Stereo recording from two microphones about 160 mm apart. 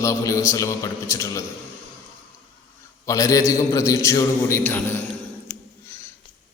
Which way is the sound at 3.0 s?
20° left (ahead or behind).